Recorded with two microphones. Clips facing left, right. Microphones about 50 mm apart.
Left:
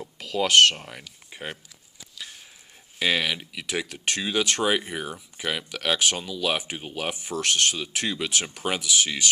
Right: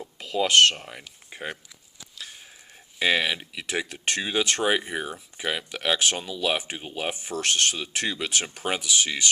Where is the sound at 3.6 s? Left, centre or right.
Right.